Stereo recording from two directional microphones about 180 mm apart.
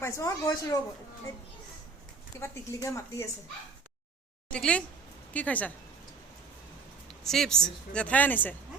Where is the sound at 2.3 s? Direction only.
15° left (ahead or behind).